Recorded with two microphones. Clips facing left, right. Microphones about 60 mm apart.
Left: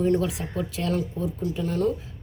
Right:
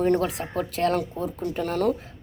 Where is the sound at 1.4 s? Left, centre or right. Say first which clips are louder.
Right 1 dB; right.